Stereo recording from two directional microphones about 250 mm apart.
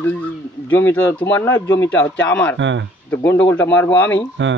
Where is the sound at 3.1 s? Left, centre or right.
Centre.